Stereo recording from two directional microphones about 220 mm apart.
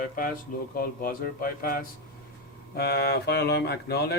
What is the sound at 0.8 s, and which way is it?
A man's voice, 40° left (ahead or behind).